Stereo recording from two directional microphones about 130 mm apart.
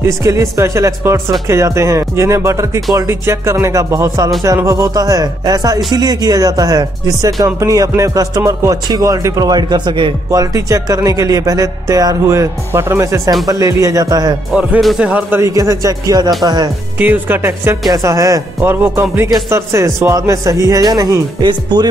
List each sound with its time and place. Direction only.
0.0 s speech: 25° right (ahead or behind)
10.3 s speech: 25° right (ahead or behind)
14.5 s speech: 5° right (ahead or behind); by 16.7 s 30° right (ahead or behind)
17.0 s speech: 15° right (ahead or behind); by 21.8 s 35° right (ahead or behind)